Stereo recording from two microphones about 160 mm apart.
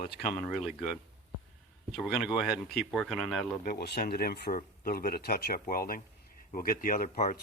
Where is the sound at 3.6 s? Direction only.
80° left.